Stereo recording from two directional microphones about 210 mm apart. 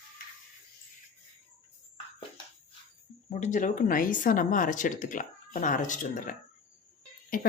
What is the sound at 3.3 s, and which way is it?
Speech, 35° left (ahead or behind).